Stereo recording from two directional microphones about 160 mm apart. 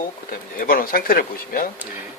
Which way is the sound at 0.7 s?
65° left (ahead or behind).